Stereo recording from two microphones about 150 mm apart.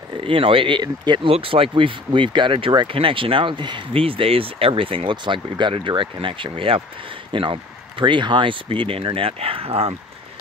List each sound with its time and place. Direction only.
0.2 s speech: 35° right (ahead or behind)